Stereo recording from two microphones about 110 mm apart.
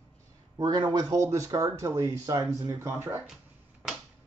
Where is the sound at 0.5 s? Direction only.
40° right (ahead or behind); by 3.2 s 20° right (ahead or behind).